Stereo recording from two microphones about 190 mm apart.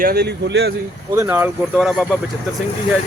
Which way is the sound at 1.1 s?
15° right (ahead or behind).